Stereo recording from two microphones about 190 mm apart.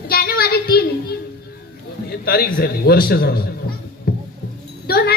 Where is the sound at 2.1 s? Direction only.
55° left (ahead or behind).